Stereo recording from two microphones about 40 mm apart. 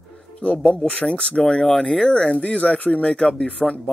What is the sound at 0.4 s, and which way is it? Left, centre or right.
Speech, left.